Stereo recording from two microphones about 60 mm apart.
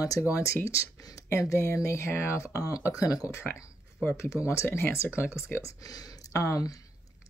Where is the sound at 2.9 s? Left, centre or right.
Left.